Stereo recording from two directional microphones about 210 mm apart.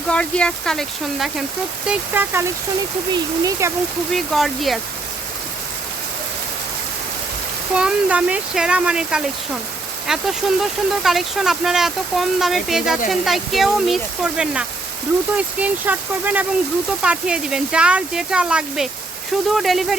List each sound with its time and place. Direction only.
0.1 s speech: 5° left (ahead or behind)
1.9 s speech: 10° right (ahead or behind)
4.1 s speech: centre (ahead or behind)
7.7 s speech: 5° right (ahead or behind)